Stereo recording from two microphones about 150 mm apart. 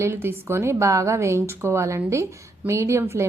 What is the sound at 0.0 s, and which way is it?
A woman's voice, 15° right (ahead or behind).